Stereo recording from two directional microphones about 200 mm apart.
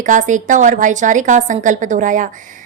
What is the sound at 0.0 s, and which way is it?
A woman's voice, 40° right (ahead or behind).